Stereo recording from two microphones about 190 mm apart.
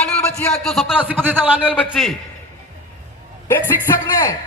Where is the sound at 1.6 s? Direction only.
5° left (ahead or behind).